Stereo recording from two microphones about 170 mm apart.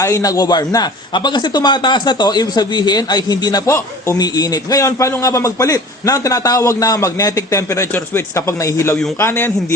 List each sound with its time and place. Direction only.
0.0 s a man's voice: 20° left (ahead or behind)